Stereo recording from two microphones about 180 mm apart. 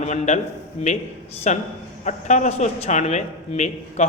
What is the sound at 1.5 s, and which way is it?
Speech, 40° left (ahead or behind).